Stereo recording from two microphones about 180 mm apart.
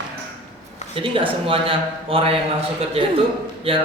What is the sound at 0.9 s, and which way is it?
Speech, 30° right (ahead or behind).